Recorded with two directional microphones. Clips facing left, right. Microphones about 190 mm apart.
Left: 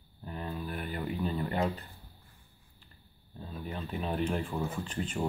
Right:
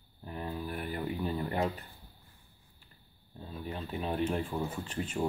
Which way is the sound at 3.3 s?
10° right (ahead or behind).